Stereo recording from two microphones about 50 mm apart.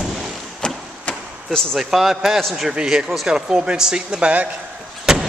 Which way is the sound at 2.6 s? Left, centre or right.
Centre.